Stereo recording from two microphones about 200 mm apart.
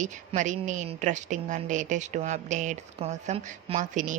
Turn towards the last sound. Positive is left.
turn(degrees=-40)  # may be behind; listen again after turning